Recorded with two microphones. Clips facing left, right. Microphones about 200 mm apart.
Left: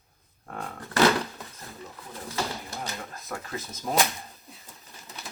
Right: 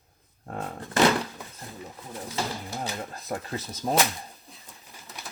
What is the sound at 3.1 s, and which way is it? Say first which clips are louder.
Speech: right 3 dB; 30° right (ahead or behind).